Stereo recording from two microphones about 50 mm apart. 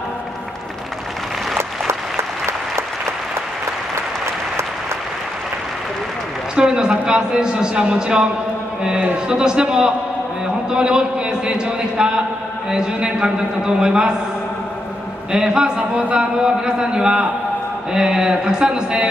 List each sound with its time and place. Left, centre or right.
1.6 s applause: right
6.5 s a man's voice: centre
15.3 s a man's voice: centre